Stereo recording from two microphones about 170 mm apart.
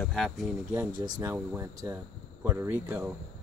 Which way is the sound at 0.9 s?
25° right (ahead or behind).